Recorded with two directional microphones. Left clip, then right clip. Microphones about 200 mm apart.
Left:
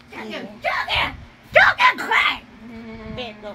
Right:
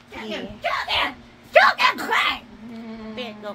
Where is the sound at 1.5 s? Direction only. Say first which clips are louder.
Left 2 dB; 10° right (ahead or behind).